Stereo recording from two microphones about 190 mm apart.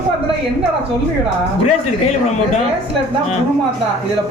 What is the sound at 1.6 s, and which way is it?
Speech, 35° left (ahead or behind).